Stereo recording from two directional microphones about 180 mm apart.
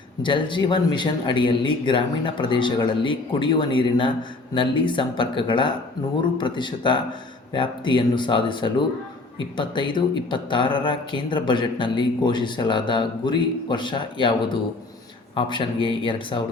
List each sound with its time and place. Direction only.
0.2 s speech: 25° left (ahead or behind)